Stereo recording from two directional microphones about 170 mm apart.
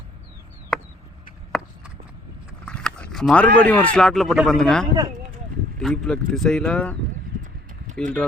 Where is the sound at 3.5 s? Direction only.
10° left (ahead or behind).